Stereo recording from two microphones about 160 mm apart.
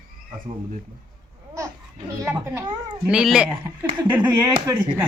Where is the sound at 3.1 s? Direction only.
5° right (ahead or behind).